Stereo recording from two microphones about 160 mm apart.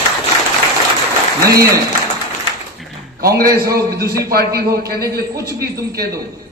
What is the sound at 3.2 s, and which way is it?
A man's voice, 70° right (ahead or behind).